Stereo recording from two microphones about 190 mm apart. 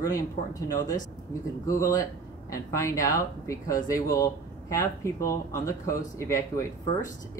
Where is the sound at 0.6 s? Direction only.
45° left (ahead or behind).